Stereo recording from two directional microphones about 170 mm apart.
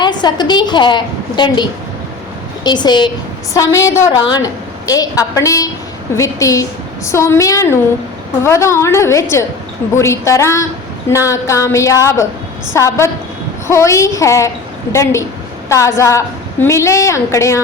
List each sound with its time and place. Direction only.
0.0 s a woman's voice: 25° left (ahead or behind)
2.6 s a woman's voice: 25° left (ahead or behind)
15.7 s a woman's voice: 15° left (ahead or behind)